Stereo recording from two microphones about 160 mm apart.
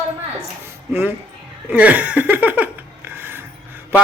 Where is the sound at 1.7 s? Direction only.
10° right (ahead or behind).